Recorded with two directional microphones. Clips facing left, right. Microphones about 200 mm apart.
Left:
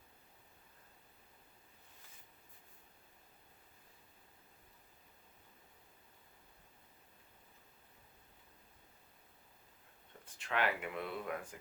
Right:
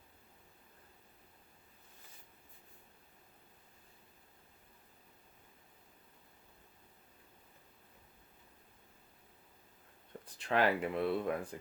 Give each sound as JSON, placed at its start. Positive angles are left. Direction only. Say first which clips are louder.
{"t": 10.2, "sound": "speech", "louder": "right 5 dB", "side_deg": -35}